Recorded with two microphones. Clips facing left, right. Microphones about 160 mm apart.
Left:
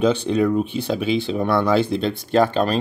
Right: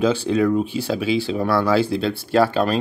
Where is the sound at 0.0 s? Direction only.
5° right (ahead or behind).